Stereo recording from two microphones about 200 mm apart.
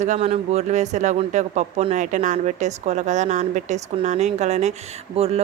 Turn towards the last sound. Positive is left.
turn(degrees=-30)  # may be behind; listen again after turning